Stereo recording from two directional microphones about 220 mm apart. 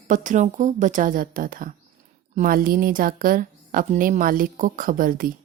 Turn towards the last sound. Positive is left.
turn(degrees=-40)  # may be behind; listen again after turning